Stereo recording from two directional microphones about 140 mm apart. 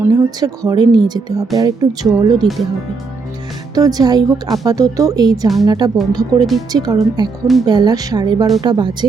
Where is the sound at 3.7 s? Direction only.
25° right (ahead or behind).